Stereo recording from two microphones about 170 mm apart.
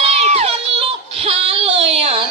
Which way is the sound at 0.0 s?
35° right (ahead or behind).